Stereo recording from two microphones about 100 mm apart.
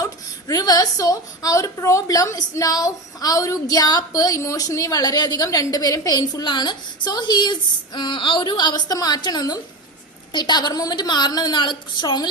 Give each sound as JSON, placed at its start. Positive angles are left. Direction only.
{"t": 0.0, "sound": "a woman's voice", "side_deg": 35}